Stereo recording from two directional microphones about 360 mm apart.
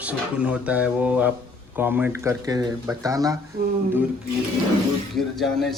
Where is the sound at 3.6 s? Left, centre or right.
Right.